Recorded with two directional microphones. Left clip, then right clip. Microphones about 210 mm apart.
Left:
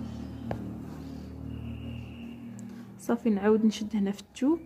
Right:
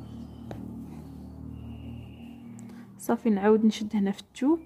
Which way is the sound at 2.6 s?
25° right (ahead or behind).